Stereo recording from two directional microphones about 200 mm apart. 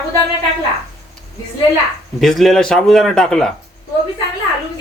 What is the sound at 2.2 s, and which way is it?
Speech, centre (ahead or behind).